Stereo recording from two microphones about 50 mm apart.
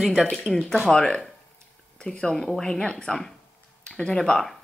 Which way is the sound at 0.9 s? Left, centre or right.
Centre.